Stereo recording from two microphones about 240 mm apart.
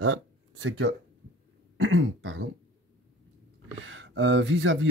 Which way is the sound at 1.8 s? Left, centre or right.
Right.